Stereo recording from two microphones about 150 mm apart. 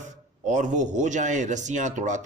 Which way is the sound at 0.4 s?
55° right (ahead or behind).